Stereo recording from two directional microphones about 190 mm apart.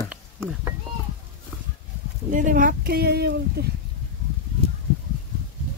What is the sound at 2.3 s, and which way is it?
Speech, 45° right (ahead or behind).